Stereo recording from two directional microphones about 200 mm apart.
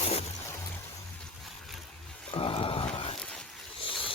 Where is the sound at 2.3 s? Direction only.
25° left (ahead or behind).